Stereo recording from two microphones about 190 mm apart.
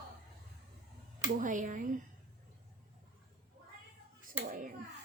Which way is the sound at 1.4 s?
45° right (ahead or behind).